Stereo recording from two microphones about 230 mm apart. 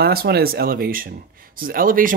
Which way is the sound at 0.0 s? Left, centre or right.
Right.